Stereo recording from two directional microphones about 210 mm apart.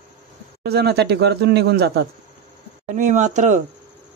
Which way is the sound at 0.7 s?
50° right (ahead or behind).